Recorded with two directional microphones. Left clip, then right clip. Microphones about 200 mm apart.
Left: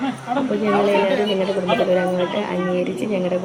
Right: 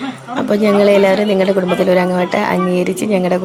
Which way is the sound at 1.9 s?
40° right (ahead or behind).